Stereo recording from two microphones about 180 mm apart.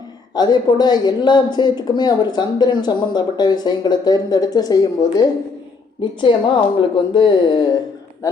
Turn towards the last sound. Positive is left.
turn(degrees=25)  # may be behind; listen again after turning